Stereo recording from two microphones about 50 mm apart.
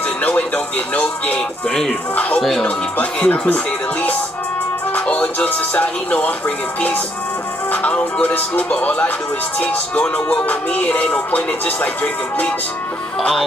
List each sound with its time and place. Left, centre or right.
0.2 s music: left
1.7 s speech: centre
2.1 s music: left
4.9 s speech: left
7.9 s music: left